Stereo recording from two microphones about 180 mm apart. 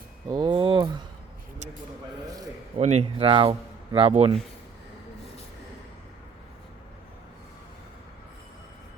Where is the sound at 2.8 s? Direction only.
40° right (ahead or behind).